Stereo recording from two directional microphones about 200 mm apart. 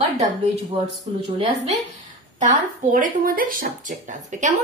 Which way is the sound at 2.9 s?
45° right (ahead or behind).